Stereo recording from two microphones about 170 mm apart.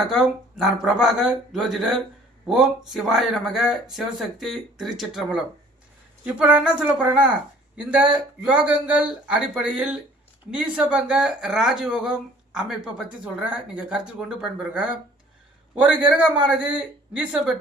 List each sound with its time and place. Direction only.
0.1 s speech: centre (ahead or behind)
16.0 s speech: 10° right (ahead or behind)